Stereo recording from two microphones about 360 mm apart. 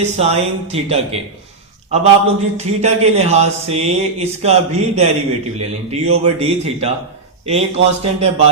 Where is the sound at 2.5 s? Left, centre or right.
Centre.